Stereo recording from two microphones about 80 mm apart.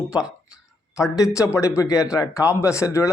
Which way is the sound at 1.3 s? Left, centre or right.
Left.